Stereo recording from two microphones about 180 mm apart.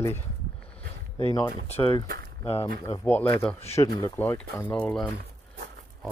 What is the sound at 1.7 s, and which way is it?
Speech, 30° left (ahead or behind).